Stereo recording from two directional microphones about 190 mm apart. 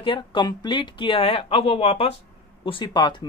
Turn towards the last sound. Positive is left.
turn(degrees=25)  # may be behind; listen again after turning